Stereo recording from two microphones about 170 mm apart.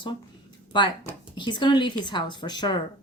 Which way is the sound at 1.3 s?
25° left (ahead or behind).